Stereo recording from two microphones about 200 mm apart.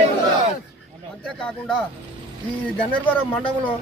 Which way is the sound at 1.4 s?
5° left (ahead or behind).